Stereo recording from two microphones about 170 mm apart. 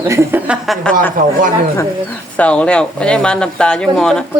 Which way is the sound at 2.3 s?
5° left (ahead or behind).